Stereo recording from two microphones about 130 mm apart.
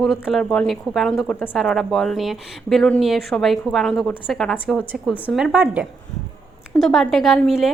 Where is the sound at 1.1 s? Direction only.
15° left (ahead or behind).